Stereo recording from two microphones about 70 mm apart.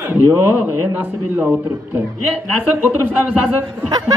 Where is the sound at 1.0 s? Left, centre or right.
Right.